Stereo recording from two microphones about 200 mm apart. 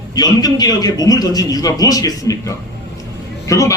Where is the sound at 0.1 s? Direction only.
20° left (ahead or behind).